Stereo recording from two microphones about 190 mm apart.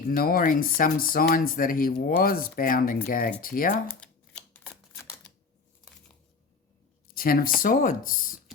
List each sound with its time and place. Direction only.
0.0 s speech: 50° left (ahead or behind)
4.0 s typewriter: 5° left (ahead or behind)
7.1 s speech: 50° left (ahead or behind)